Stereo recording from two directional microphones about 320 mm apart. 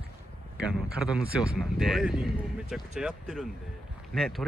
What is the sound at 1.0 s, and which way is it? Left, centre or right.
Speech, centre.